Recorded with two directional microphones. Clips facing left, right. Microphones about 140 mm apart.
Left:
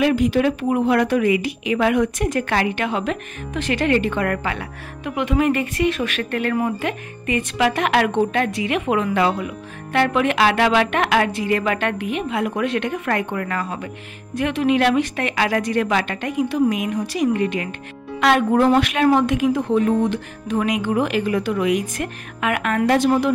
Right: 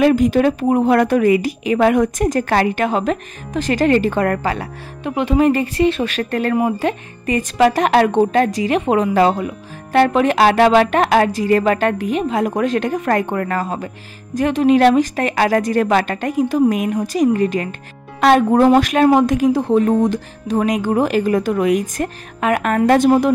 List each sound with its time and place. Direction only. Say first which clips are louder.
0.0 s a woman's voice: right 4 dB; 45° right (ahead or behind)